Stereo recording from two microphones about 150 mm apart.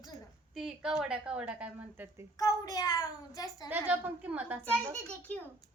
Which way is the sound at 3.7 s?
10° right (ahead or behind).